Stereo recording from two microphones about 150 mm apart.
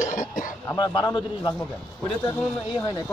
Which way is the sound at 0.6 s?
25° left (ahead or behind).